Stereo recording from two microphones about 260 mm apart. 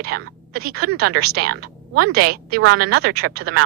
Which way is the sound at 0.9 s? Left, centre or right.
Right.